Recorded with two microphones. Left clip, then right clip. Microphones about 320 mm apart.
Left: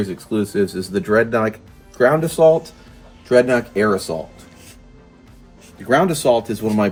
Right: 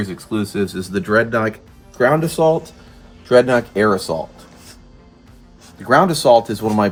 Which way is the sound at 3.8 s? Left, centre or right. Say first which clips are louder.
Right 2 dB; centre.